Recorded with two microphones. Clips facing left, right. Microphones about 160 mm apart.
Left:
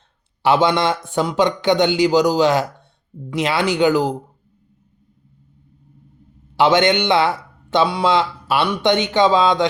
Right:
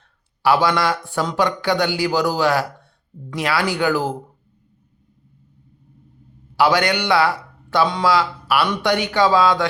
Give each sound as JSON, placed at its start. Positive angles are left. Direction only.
{"t": 0.4, "sound": "speech", "side_deg": 20}
{"t": 6.6, "sound": "a man's voice", "side_deg": 25}